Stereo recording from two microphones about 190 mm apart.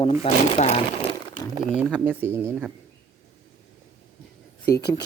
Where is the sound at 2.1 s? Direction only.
10° right (ahead or behind).